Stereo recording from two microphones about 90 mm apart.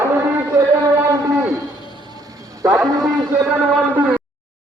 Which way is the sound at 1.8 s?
55° right (ahead or behind).